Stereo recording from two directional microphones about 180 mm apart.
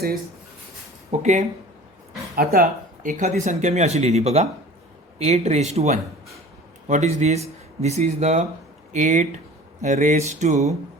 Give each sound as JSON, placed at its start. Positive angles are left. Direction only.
{"t": 1.1, "sound": "speech", "side_deg": -40}
{"t": 2.3, "sound": "speech", "side_deg": -55}